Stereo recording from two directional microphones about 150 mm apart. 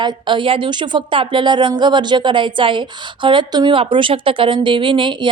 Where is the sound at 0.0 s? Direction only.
30° right (ahead or behind).